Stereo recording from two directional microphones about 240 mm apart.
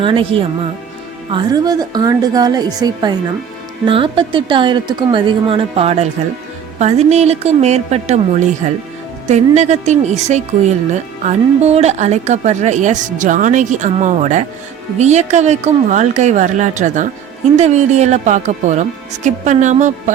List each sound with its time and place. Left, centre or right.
0.0 s a woman's voice: right